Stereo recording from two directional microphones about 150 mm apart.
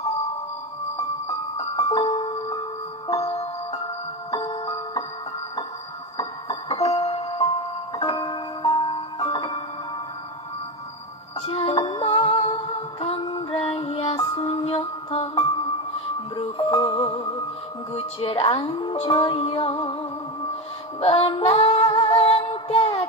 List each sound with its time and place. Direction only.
1.6 s music: 35° left (ahead or behind)
4.3 s music: 25° left (ahead or behind)
6.1 s music: 35° left (ahead or behind)
11.4 s music: 40° left (ahead or behind)
14.1 s music: 25° left (ahead or behind)
21.0 s female singing: 40° left (ahead or behind)
22.0 s music: 45° left (ahead or behind)